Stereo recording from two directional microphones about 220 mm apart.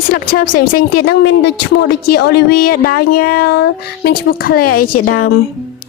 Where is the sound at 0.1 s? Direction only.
40° left (ahead or behind).